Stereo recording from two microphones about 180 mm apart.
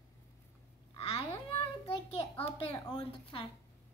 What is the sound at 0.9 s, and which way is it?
Babbling, 35° left (ahead or behind).